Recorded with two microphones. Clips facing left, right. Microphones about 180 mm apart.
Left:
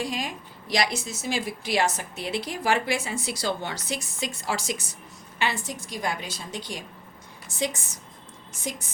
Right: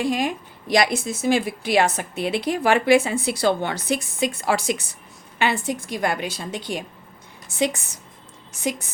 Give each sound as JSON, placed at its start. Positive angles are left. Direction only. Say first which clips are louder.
{"t": 0.0, "sound": "a woman's voice", "louder": "right 8 dB", "side_deg": -55}